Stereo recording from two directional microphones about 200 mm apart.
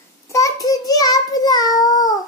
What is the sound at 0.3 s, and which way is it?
Child singing, 15° left (ahead or behind).